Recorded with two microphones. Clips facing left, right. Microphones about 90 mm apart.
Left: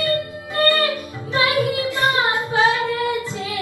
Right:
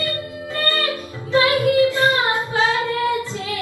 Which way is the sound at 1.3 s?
20° left (ahead or behind).